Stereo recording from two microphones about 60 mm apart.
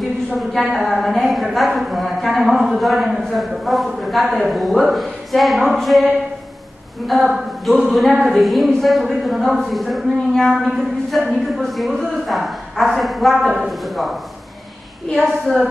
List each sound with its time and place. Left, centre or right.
0.7 s a woman's voice: centre
15.1 s a woman's voice: centre